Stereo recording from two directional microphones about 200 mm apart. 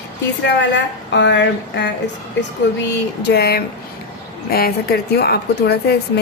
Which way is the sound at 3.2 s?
55° left (ahead or behind).